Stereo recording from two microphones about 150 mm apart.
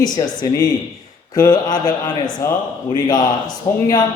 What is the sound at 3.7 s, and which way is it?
Speech, 20° left (ahead or behind).